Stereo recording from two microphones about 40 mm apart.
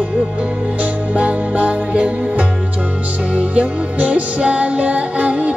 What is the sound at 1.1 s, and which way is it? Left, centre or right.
Music, right.